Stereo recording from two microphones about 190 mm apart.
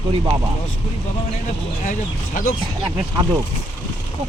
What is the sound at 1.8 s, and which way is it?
Speech, 45° left (ahead or behind).